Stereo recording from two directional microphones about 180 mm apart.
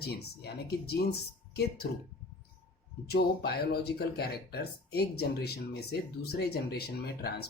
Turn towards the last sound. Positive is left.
turn(degrees=60)  # may be behind; listen again after turning